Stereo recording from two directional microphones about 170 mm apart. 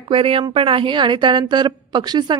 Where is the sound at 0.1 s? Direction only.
30° right (ahead or behind).